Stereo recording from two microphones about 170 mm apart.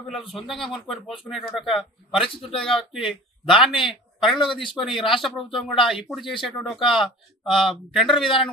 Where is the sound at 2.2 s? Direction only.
35° left (ahead or behind).